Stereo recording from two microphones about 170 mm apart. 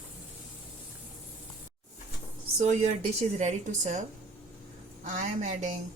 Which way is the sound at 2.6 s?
40° right (ahead or behind).